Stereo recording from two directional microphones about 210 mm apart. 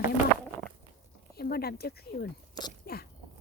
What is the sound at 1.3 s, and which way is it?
Speech, 45° left (ahead or behind).